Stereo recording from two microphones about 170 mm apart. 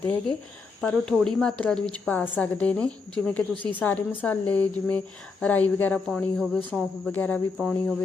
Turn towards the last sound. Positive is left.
turn(degrees=5)  # may be behind; listen again after turning